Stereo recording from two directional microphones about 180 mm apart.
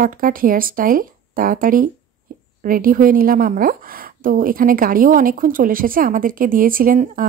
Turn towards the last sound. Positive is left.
turn(degrees=-50)  # may be behind; listen again after turning